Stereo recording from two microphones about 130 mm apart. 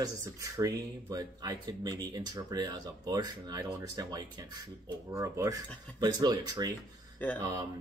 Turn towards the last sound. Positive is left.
turn(degrees=-30)  # may be behind; listen again after turning